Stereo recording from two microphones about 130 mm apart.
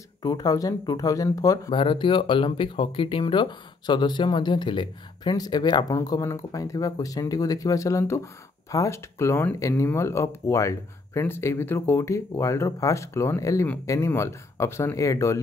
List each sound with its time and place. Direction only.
0.2 s speech: 30° left (ahead or behind)
1.7 s speech: 40° left (ahead or behind); by 15.4 s 25° left (ahead or behind)